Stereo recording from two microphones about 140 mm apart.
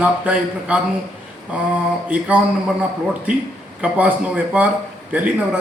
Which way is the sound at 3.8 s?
10° right (ahead or behind).